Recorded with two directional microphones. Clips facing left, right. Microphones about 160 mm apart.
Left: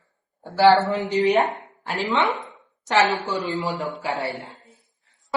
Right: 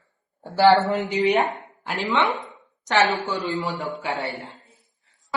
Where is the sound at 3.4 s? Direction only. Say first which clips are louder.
Left 1 dB; centre (ahead or behind).